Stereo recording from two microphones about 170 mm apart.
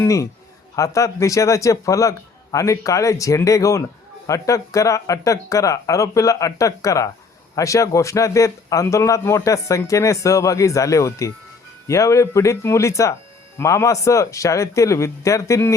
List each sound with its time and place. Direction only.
0.0 s a man's voice: 20° left (ahead or behind)